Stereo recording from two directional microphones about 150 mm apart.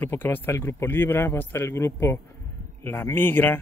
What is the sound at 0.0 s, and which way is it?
Speech, 15° left (ahead or behind).